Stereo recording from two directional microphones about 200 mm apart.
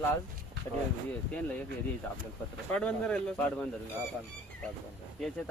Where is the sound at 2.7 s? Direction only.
5° left (ahead or behind).